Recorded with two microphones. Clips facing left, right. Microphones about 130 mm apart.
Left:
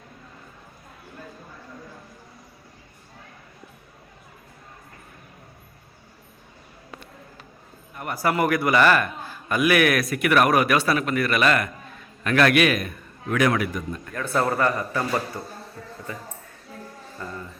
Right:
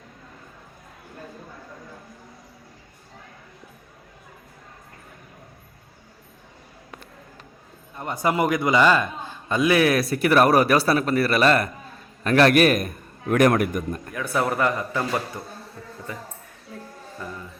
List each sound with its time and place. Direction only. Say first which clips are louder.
7.9 s a man's voice: right 1 dB; 20° right (ahead or behind); by 14.1 s 50° right (ahead or behind)
14.1 s a man's voice: left 1 dB; 10° right (ahead or behind)
17.2 s music: even; 15° right (ahead or behind)